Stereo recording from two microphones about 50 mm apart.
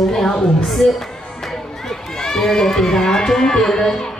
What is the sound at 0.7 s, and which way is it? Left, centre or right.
Speech, centre.